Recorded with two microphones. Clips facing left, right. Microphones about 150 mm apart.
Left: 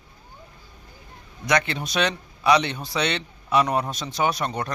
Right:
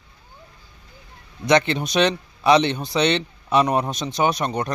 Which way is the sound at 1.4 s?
25° right (ahead or behind).